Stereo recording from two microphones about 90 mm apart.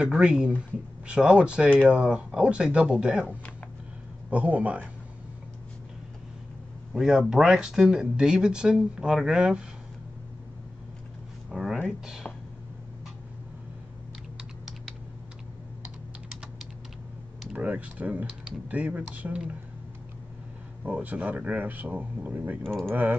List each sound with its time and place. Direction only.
0.0 s speech: 10° right (ahead or behind)
6.9 s speech: 5° right (ahead or behind)
11.5 s speech: 5° right (ahead or behind)
17.5 s speech: 15° right (ahead or behind)
20.8 s speech: 15° right (ahead or behind)
22.6 s speech: 5° left (ahead or behind)
22.8 s speech: 20° right (ahead or behind)